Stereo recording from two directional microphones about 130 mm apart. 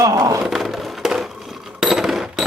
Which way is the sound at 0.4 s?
Centre (ahead or behind).